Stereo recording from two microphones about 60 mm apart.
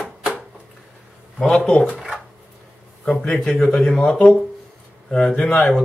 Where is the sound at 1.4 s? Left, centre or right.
Centre.